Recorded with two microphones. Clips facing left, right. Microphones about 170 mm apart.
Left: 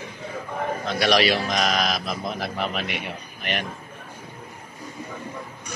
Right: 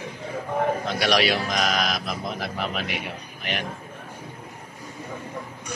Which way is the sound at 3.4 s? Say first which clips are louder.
Left 2 dB; 60° left (ahead or behind).